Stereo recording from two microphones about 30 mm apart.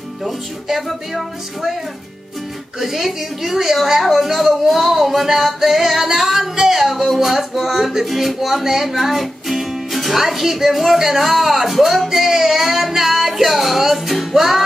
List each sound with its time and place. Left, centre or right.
0.7 s speech: centre
2.8 s speech: centre
6.5 s music: centre
6.8 s speech: centre
14.3 s music: centre